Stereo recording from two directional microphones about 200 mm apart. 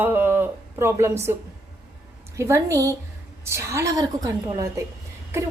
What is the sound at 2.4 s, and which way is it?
A woman's voice, 15° right (ahead or behind).